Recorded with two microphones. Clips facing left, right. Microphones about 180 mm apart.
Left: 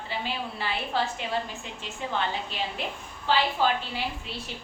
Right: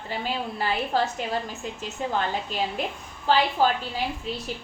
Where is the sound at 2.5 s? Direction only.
45° right (ahead or behind).